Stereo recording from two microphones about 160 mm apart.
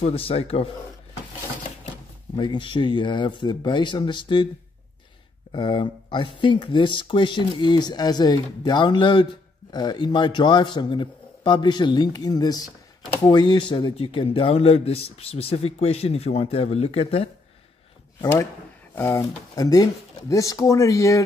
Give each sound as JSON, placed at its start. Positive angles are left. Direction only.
{"t": 0.0, "sound": "a man's voice", "side_deg": 35}
{"t": 2.3, "sound": "speech", "side_deg": 30}
{"t": 5.5, "sound": "a man's voice", "side_deg": 30}
{"t": 18.2, "sound": "speech", "side_deg": 20}